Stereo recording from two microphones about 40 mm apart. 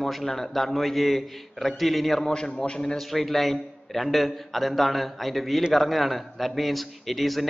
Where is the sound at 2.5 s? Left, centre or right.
Left.